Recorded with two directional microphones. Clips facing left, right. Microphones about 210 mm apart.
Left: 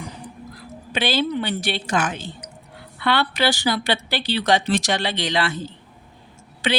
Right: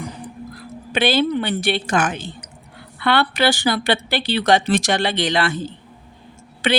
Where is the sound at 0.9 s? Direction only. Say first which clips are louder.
Right 4 dB; 55° right (ahead or behind).